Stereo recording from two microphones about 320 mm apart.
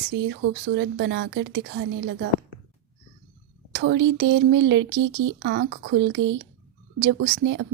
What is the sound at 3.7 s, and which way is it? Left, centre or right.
Speech, right.